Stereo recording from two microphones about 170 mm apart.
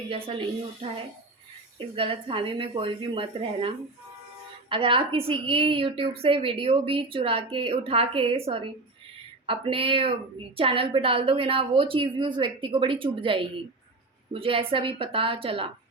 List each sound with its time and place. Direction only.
0.8 s a woman's voice: 35° right (ahead or behind)
2.0 s a woman's voice: 30° right (ahead or behind)